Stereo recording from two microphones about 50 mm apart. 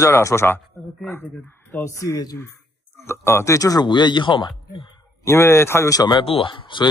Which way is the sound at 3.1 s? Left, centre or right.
Left.